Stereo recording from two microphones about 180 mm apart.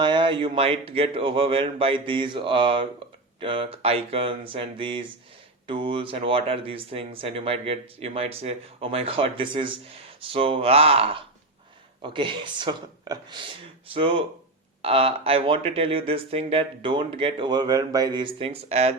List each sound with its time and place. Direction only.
0.0 s speech: 25° right (ahead or behind)